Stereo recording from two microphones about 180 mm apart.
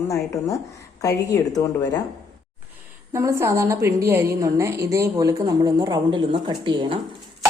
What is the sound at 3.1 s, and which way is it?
A woman's voice, 15° right (ahead or behind).